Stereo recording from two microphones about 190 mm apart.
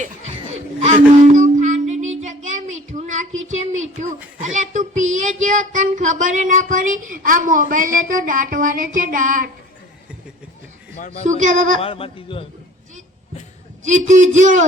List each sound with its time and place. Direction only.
0.8 s a sound: 40° right (ahead or behind)
2.9 s child singing: 40° right (ahead or behind)
4.4 s a sound: 40° right (ahead or behind)
5.1 s child singing: 40° right (ahead or behind)
11.3 s a man's voice: 40° right (ahead or behind)
11.8 s speech: 30° left (ahead or behind)
13.8 s a man's voice: 40° right (ahead or behind)